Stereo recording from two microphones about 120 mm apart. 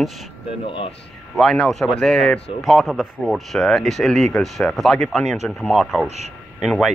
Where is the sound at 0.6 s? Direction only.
50° left (ahead or behind).